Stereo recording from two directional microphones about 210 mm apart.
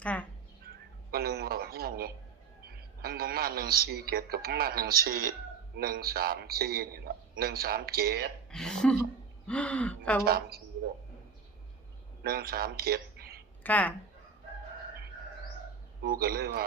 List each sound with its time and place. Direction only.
0.0 s speech: 5° left (ahead or behind)
1.1 s a sound: 45° right (ahead or behind)
2.6 s a man's voice: 50° right (ahead or behind)
8.4 s speech: 5° left (ahead or behind)
10.2 s a man's voice: 45° right (ahead or behind)
12.2 s a man's voice: 45° right (ahead or behind)
13.6 s speech: 10° left (ahead or behind)
16.0 s a man's voice: 45° right (ahead or behind)